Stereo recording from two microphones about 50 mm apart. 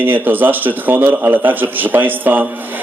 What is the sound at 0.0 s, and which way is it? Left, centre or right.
A man's voice, right.